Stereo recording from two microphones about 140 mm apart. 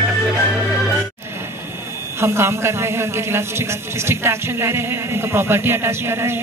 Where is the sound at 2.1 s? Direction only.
20° right (ahead or behind).